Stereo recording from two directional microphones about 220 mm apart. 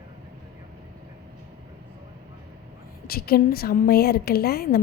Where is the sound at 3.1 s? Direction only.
45° left (ahead or behind).